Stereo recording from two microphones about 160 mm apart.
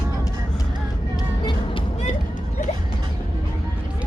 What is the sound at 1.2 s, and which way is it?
Music, 25° left (ahead or behind).